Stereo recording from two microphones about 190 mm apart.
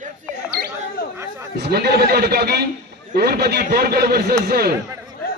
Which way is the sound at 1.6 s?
60° right (ahead or behind).